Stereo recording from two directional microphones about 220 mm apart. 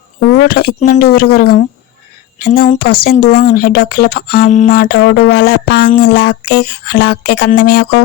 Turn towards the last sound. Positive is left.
turn(degrees=45)  # may be behind; listen again after turning